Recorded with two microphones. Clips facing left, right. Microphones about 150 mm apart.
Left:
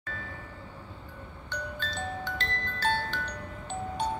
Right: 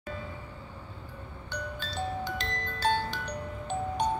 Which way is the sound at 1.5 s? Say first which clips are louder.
Even; 10° right (ahead or behind).